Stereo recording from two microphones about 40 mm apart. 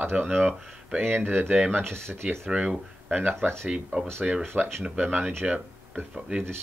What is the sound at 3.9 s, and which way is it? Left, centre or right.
Speech, right.